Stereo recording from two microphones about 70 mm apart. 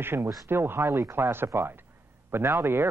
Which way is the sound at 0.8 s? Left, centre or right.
Right.